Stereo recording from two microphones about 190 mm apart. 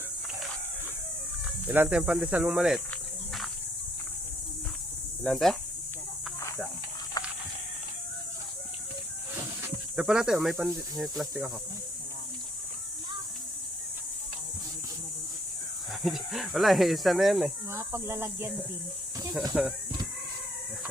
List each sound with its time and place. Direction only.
1.6 s speech: 10° right (ahead or behind)
2.9 s cricket: centre (ahead or behind)
5.2 s speech: centre (ahead or behind)
9.6 s snake: 15° right (ahead or behind)
10.0 s speech: 5° right (ahead or behind)
16.0 s speech: centre (ahead or behind)
17.7 s speech: 15° right (ahead or behind)